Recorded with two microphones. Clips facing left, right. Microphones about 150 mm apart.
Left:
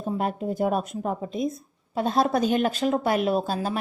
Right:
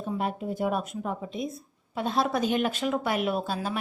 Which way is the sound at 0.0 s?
45° left (ahead or behind).